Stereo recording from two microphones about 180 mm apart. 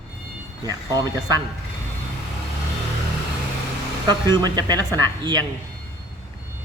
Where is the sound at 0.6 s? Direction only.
20° right (ahead or behind).